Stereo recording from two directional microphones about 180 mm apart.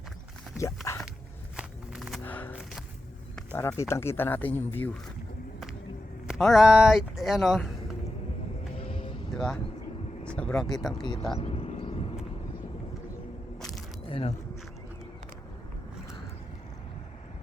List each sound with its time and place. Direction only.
0.9 s dog: 15° left (ahead or behind)
1.5 s walk: centre (ahead or behind)
2.2 s a sound: 10° left (ahead or behind)
3.3 s speech: 10° left (ahead or behind)
6.2 s speech: centre (ahead or behind)
8.8 s a sound: 30° left (ahead or behind)
9.3 s speech: centre (ahead or behind)
10.2 s vehicle: 5° left (ahead or behind)
10.8 s speech: centre (ahead or behind)
11.0 s speech: 25° left (ahead or behind)
11.3 s a sound: 35° left (ahead or behind)
14.1 s speech: 30° left (ahead or behind)